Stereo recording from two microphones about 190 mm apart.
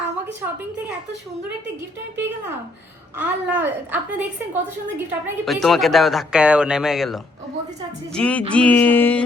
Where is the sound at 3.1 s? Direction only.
10° right (ahead or behind).